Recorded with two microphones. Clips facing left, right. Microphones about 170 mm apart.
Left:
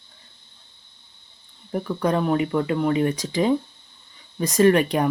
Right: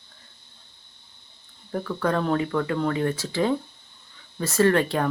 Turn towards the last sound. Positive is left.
turn(degrees=15)  # may be behind; listen again after turning